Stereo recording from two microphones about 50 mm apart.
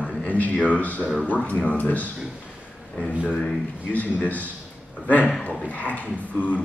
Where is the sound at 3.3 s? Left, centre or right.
Centre.